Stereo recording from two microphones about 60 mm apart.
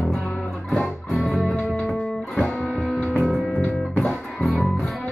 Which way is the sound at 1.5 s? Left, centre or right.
Centre.